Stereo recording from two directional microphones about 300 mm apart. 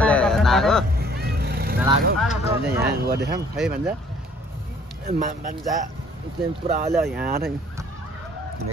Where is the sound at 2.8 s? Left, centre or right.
Right.